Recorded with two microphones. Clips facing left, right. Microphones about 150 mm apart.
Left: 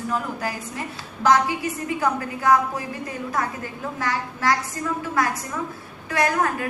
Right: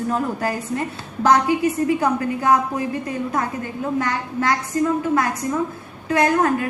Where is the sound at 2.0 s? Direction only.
20° right (ahead or behind).